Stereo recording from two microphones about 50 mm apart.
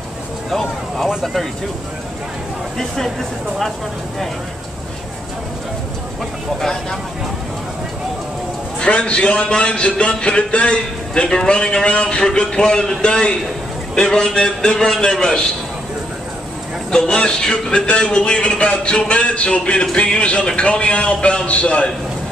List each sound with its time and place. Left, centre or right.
0.5 s speech: centre
6.6 s a man's voice: centre
8.7 s a man's voice: left
16.9 s speech: centre